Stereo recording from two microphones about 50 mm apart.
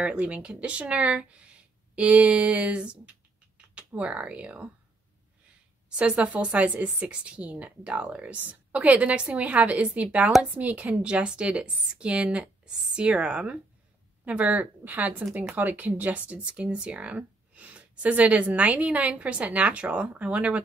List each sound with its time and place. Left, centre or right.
0.0 s speech: right
5.9 s speech: right